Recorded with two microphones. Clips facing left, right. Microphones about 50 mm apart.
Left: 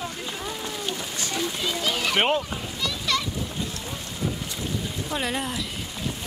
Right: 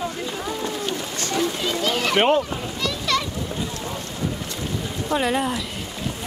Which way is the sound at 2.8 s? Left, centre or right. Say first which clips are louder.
Right 3 dB; centre.